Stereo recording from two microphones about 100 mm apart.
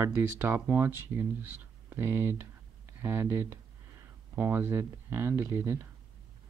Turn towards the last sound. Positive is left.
turn(degrees=-25)  # may be behind; listen again after turning